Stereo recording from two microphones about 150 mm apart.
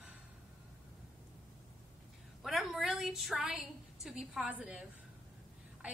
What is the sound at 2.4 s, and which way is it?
A woman's voice, centre (ahead or behind).